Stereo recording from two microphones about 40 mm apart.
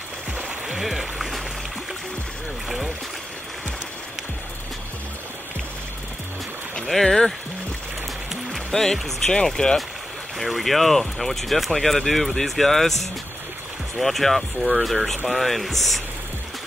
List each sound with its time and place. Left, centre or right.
0.4 s music: centre
6.9 s speech: centre
8.7 s speech: centre
9.3 s speech: centre
10.4 s speech: centre
13.9 s speech: centre